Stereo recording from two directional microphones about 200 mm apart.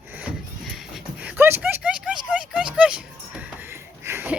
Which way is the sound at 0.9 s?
5° right (ahead or behind).